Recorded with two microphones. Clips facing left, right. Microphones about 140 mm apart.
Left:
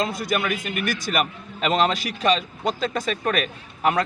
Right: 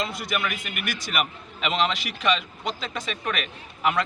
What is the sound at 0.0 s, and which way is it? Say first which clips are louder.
A man's voice: left 4 dB; 40° left (ahead or behind).